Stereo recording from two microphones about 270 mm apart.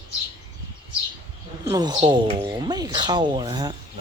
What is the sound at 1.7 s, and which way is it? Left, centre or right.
Speech, centre.